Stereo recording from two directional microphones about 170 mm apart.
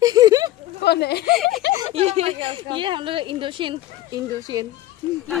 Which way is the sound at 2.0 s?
40° right (ahead or behind).